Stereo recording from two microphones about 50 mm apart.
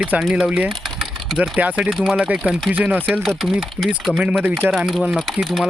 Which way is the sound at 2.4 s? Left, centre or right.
Right.